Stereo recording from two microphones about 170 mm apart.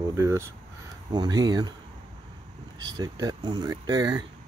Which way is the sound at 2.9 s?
25° right (ahead or behind).